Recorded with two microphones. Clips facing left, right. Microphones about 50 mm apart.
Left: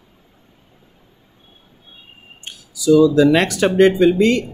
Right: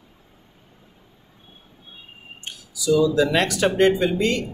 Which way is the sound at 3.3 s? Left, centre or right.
Left.